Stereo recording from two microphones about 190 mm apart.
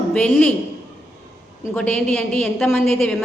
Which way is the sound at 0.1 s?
5° left (ahead or behind).